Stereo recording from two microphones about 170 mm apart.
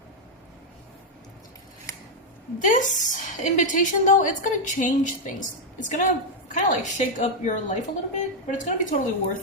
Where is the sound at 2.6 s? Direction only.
50° left (ahead or behind).